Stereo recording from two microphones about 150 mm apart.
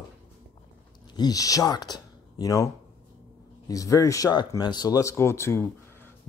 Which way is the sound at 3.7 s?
20° left (ahead or behind).